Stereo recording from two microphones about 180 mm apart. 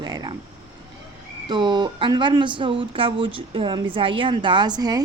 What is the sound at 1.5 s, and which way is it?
A woman's voice, 25° right (ahead or behind).